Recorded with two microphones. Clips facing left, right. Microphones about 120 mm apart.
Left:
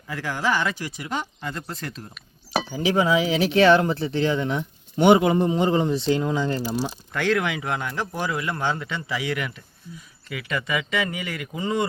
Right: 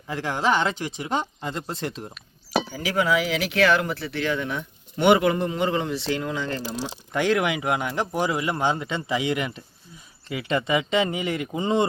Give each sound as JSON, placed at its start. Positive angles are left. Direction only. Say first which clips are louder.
{"t": 0.1, "sound": "speech", "louder": "right 2 dB", "side_deg": -25}
{"t": 2.6, "sound": "speech", "louder": "left 5 dB", "side_deg": 25}
{"t": 6.5, "sound": "speech", "louder": "left 4 dB", "side_deg": 15}
{"t": 6.9, "sound": "speech", "louder": "right 5 dB", "side_deg": -20}